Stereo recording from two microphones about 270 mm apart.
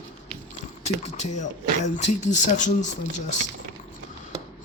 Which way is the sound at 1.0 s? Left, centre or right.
Left.